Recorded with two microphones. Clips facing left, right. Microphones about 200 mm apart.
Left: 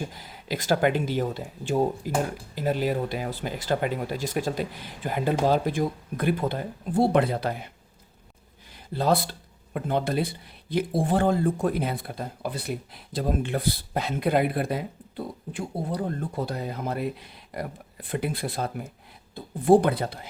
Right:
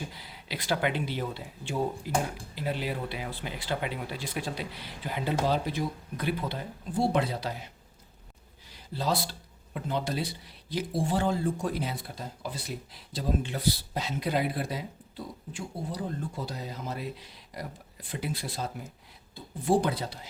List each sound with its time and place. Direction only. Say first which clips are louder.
0.1 s speech: left 7 dB; 45° left (ahead or behind)
8.7 s a sound: left 6 dB; 55° left (ahead or behind)
9.7 s speech: left 6 dB; 55° left (ahead or behind)